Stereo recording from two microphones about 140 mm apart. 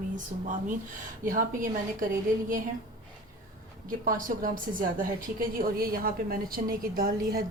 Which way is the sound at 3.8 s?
75° right (ahead or behind).